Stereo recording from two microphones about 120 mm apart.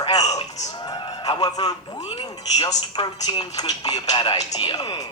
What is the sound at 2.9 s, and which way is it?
Speech, 40° left (ahead or behind).